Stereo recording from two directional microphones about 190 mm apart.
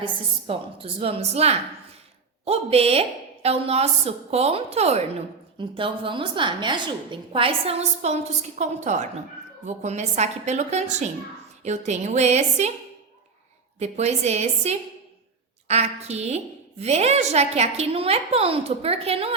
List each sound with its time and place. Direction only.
0.0 s a woman's voice: 30° right (ahead or behind)
13.7 s a woman's voice: 35° right (ahead or behind)